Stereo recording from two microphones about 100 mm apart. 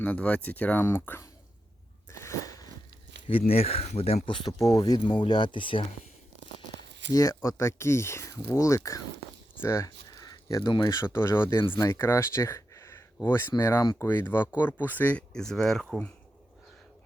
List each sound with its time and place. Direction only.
0.0 s speech: 15° left (ahead or behind)
2.1 s biting: 30° left (ahead or behind)
3.2 s speech: 75° left (ahead or behind)
4.5 s speech: 35° left (ahead or behind); by 5.8 s 55° left (ahead or behind)
7.1 s speech: 35° left (ahead or behind)
10.2 s a sound: 35° left (ahead or behind)
10.7 s speech: 45° left (ahead or behind)
10.9 s speech: 25° left (ahead or behind); by 16.0 s 5° left (ahead or behind)